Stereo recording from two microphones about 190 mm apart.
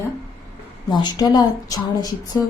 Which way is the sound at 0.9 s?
25° left (ahead or behind).